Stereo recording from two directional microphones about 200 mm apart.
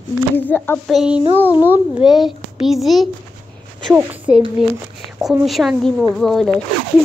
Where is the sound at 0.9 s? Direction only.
Centre (ahead or behind).